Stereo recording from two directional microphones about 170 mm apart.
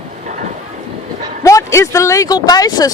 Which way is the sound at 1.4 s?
20° left (ahead or behind).